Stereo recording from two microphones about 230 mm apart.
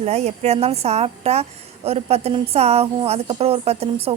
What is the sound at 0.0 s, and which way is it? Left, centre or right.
A woman's voice, right.